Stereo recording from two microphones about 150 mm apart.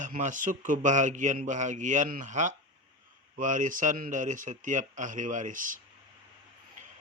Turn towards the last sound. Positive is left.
turn(degrees=-60)  # may be behind; listen again after turning